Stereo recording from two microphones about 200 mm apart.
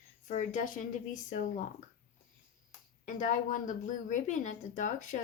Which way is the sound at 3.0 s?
40° left (ahead or behind).